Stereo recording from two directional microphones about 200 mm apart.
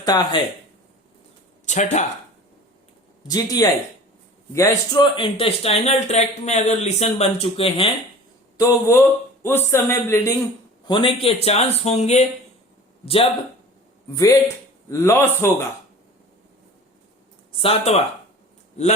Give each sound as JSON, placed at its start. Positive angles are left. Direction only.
{"t": 0.0, "sound": "speech", "side_deg": 20}
{"t": 1.6, "sound": "speech", "side_deg": 35}
{"t": 3.2, "sound": "speech", "side_deg": 20}
{"t": 8.5, "sound": "a man's voice", "side_deg": 15}
{"t": 10.8, "sound": "speech", "side_deg": 25}
{"t": 14.2, "sound": "a man's voice", "side_deg": 15}
{"t": 17.5, "sound": "speech", "side_deg": 25}